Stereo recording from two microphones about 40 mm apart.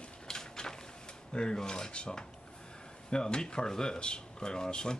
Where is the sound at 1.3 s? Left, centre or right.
Left.